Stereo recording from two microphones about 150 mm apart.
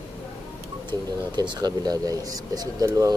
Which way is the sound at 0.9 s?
30° right (ahead or behind).